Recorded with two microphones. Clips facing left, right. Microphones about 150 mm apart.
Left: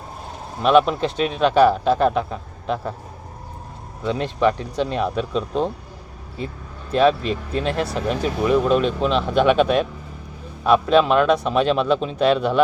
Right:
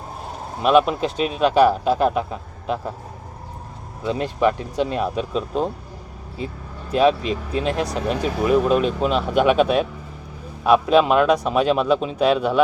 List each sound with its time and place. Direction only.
0.6 s speech: 5° right (ahead or behind)
4.0 s speech: 5° right (ahead or behind)
6.9 s speech: 5° right (ahead or behind)